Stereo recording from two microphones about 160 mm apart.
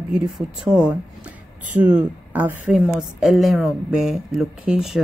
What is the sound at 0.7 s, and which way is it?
Speech, 5° right (ahead or behind).